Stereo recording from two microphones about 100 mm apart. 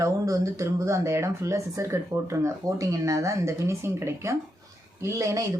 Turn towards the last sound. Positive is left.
turn(degrees=-35)  # may be behind; listen again after turning